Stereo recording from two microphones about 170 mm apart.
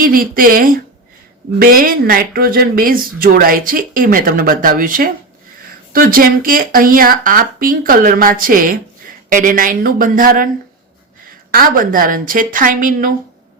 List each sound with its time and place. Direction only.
0.0 s speech: 55° right (ahead or behind)